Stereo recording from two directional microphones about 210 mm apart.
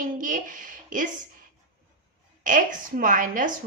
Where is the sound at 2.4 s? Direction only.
40° right (ahead or behind).